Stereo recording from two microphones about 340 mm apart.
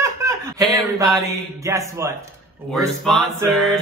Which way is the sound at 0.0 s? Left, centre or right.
Centre.